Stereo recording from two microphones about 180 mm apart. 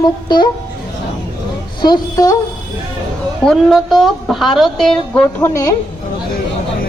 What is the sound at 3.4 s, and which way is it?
A woman's voice, centre (ahead or behind).